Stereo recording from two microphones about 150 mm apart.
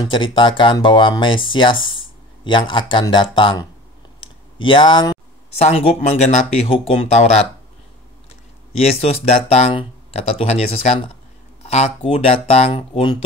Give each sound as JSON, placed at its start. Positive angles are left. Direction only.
{"t": 0.1, "sound": "speech", "side_deg": 35}
{"t": 4.2, "sound": "clicking", "side_deg": 35}
{"t": 5.6, "sound": "speech", "side_deg": 45}
{"t": 8.8, "sound": "speech", "side_deg": 45}